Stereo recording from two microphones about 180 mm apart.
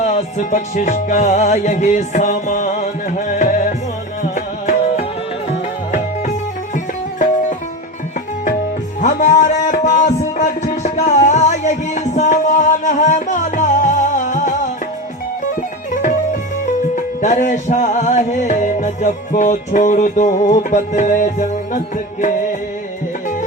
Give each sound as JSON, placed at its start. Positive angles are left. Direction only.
{"t": 0.0, "sound": "music", "side_deg": 40}
{"t": 9.0, "sound": "music", "side_deg": 45}
{"t": 16.9, "sound": "music", "side_deg": 45}